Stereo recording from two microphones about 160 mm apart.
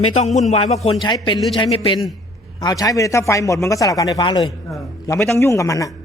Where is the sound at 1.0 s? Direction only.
30° left (ahead or behind).